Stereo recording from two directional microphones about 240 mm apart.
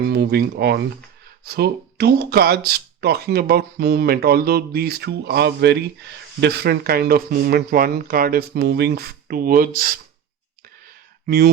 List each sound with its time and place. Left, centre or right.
0.0 s speech: right
11.3 s speech: right